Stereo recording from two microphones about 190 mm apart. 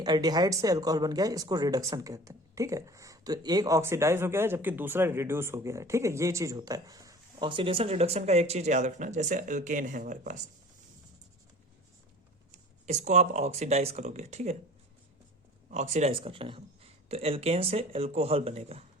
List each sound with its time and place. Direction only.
0.0 s speech: 20° right (ahead or behind); by 10.4 s 40° right (ahead or behind)
12.5 s speech: 35° right (ahead or behind)
15.7 s speech: 35° right (ahead or behind)